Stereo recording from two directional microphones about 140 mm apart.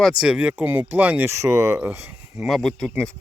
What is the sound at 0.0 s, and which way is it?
Speech, 5° right (ahead or behind).